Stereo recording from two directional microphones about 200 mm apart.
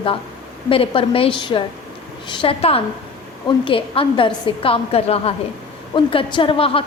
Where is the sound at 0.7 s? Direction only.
25° left (ahead or behind).